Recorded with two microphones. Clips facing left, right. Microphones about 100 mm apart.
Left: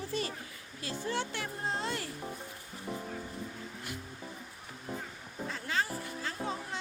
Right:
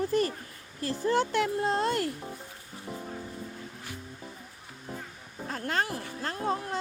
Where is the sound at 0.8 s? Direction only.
55° right (ahead or behind).